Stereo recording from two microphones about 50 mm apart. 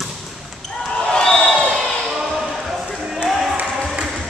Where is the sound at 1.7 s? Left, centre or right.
Centre.